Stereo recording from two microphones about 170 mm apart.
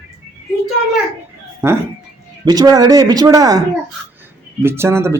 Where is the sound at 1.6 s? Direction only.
15° right (ahead or behind).